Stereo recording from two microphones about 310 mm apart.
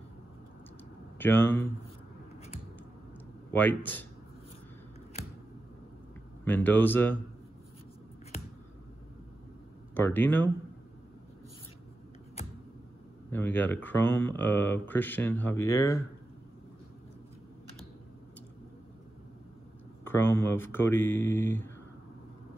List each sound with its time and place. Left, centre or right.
1.1 s speech: centre
3.5 s speech: centre
6.4 s speech: centre
9.9 s speech: centre
12.4 s a sound: centre
13.3 s speech: centre
20.1 s speech: centre